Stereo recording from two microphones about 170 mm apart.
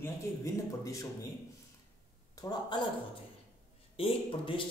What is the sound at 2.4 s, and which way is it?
Speech, 20° left (ahead or behind).